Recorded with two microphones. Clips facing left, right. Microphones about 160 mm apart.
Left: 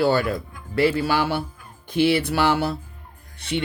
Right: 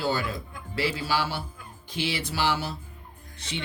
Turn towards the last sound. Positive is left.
turn(degrees=60)  # may be behind; listen again after turning